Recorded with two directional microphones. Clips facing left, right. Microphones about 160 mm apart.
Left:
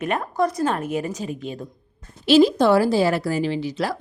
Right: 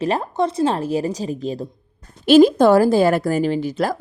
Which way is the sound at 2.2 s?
50° right (ahead or behind).